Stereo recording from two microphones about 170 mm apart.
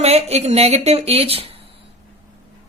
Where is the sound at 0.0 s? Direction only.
40° right (ahead or behind).